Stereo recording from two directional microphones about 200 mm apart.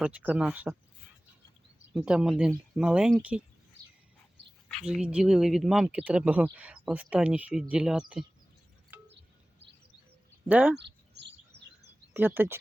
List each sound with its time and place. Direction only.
0.0 s speech: 5° right (ahead or behind)
1.9 s speech: 5° right (ahead or behind)
4.7 s speech: centre (ahead or behind)
8.9 s wind chime: 10° right (ahead or behind)
10.5 s speech: 10° right (ahead or behind)
10.8 s bird: 60° right (ahead or behind)
12.1 s speech: 10° right (ahead or behind)